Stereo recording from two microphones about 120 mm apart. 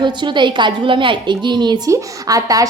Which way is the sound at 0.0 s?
40° right (ahead or behind).